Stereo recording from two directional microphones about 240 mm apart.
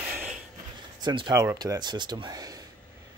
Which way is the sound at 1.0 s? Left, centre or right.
Centre.